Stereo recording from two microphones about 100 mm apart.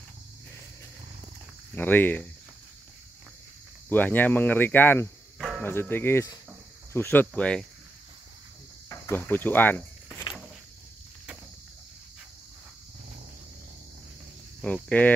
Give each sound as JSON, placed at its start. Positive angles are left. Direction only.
{"t": 1.8, "sound": "speech", "side_deg": 20}
{"t": 3.9, "sound": "speech", "side_deg": 20}
{"t": 9.1, "sound": "speech", "side_deg": 20}
{"t": 14.6, "sound": "speech", "side_deg": 15}